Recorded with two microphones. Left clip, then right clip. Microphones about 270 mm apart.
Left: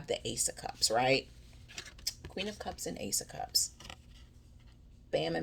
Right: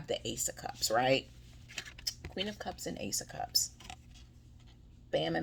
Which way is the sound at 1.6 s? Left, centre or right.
Centre.